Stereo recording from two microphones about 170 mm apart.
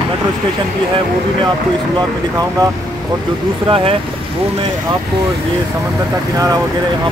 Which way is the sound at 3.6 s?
30° right (ahead or behind).